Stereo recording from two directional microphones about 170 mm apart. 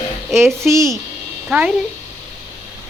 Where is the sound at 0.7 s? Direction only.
15° right (ahead or behind).